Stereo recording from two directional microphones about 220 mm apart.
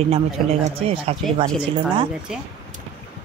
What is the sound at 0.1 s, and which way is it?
A man's voice, 25° right (ahead or behind).